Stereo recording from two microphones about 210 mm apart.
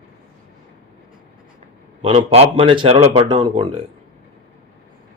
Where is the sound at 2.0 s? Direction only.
30° right (ahead or behind).